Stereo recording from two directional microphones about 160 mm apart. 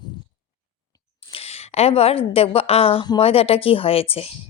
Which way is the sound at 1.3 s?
40° left (ahead or behind).